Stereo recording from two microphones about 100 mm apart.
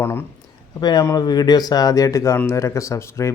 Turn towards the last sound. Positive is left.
turn(degrees=30)  # may be behind; listen again after turning